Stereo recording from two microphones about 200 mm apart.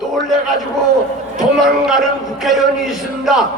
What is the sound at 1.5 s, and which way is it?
A man's voice, centre (ahead or behind).